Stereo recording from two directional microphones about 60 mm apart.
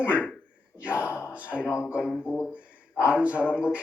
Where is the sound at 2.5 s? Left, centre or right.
Right.